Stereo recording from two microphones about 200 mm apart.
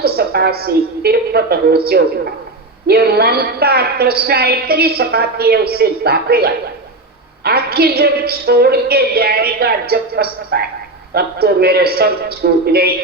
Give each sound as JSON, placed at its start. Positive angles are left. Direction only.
{"t": 0.0, "sound": "a woman's voice", "side_deg": -50}